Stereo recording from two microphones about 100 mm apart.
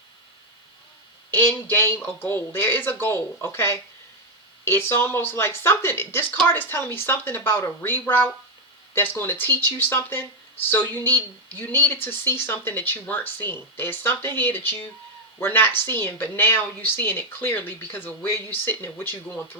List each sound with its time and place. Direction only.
1.3 s speech: 25° left (ahead or behind)